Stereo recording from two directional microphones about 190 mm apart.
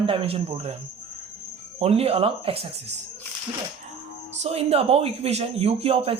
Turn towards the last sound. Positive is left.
turn(degrees=-30)  # may be behind; listen again after turning